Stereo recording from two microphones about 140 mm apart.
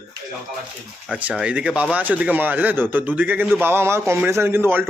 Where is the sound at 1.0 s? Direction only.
10° right (ahead or behind).